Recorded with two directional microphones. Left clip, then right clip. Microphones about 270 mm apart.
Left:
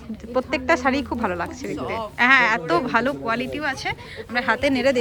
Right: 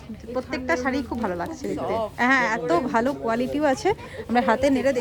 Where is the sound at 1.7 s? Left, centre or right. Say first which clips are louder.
Right 3 dB; right.